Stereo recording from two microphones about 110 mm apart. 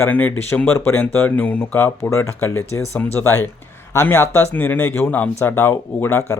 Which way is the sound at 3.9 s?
25° left (ahead or behind).